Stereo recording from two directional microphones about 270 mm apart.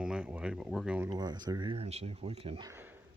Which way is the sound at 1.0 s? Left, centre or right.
Centre.